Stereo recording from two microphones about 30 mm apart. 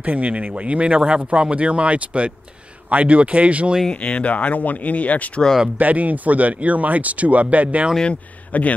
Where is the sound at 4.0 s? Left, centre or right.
Left.